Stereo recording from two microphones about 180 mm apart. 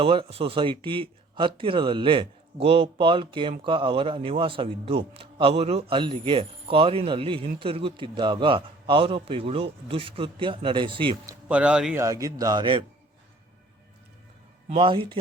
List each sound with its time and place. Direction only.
0.0 s a man's voice: 30° right (ahead or behind)
11.4 s speech: 5° right (ahead or behind)
12.0 s a man's voice: 20° right (ahead or behind)
14.7 s a man's voice: 30° right (ahead or behind)